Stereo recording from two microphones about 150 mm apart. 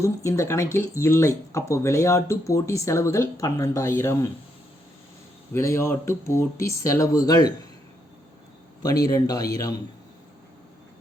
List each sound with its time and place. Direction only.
0.0 s speech: 20° left (ahead or behind)
5.5 s speech: 20° left (ahead or behind)
9.0 s speech: 25° left (ahead or behind)